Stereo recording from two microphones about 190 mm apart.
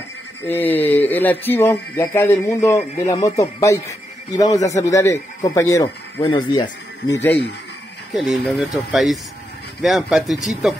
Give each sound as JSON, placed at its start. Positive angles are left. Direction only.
{"t": 0.5, "sound": "speech", "side_deg": 10}
{"t": 8.1, "sound": "speech", "side_deg": 0}